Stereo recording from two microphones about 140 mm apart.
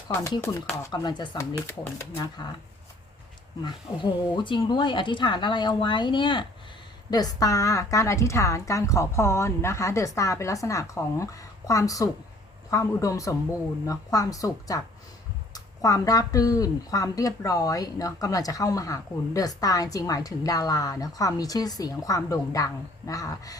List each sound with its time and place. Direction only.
0.1 s speech: 20° left (ahead or behind)
3.6 s speech: 30° left (ahead or behind)